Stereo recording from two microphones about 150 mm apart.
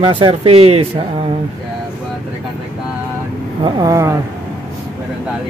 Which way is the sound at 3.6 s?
25° right (ahead or behind).